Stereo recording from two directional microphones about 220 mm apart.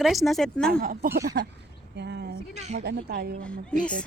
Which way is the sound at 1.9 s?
50° right (ahead or behind).